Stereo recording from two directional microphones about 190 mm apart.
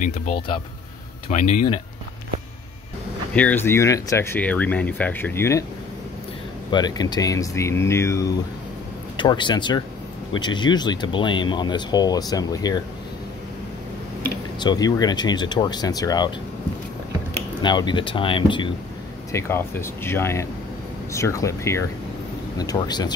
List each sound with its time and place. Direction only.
0.0 s speech: 40° left (ahead or behind)
3.3 s speech: 10° left (ahead or behind)
6.7 s speech: 20° left (ahead or behind)
9.1 s speech: 25° left (ahead or behind)
14.6 s speech: 20° left (ahead or behind)
17.6 s speech: 25° left (ahead or behind)
19.3 s speech: 15° left (ahead or behind)